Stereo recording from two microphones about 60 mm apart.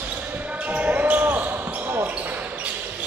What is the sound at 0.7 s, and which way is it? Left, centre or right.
Basketball bounce, right.